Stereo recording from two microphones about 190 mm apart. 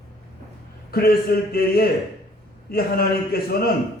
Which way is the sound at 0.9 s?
55° left (ahead or behind).